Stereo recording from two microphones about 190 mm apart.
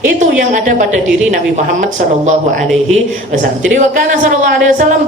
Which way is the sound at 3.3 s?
40° right (ahead or behind).